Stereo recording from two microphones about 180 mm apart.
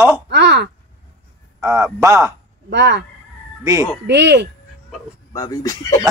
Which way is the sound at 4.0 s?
70° right (ahead or behind).